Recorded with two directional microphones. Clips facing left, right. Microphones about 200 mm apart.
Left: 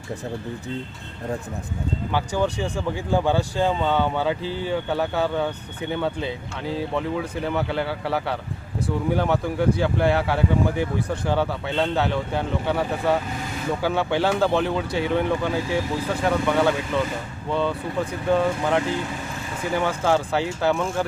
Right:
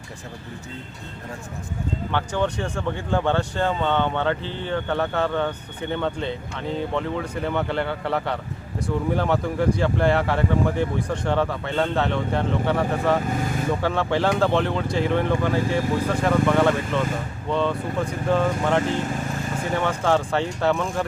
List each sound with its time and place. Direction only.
2.1 s speech: 10° left (ahead or behind)